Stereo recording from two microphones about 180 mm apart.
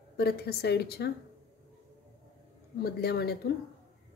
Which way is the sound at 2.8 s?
65° left (ahead or behind).